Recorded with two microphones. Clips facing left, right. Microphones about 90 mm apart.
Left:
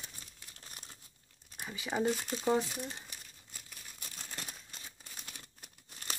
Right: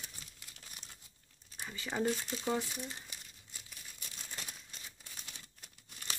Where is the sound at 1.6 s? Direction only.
10° left (ahead or behind).